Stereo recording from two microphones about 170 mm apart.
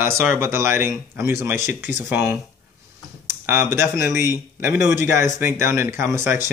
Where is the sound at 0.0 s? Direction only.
10° right (ahead or behind).